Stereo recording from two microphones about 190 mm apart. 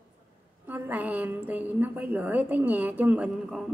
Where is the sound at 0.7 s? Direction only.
10° right (ahead or behind).